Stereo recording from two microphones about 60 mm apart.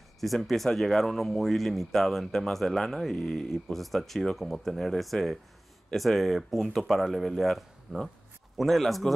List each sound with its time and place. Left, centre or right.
0.2 s speech: centre